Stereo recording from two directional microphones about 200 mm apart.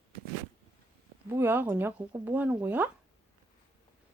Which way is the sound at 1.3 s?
10° right (ahead or behind).